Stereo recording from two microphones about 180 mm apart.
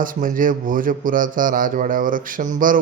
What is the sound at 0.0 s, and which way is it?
Speech, 50° right (ahead or behind).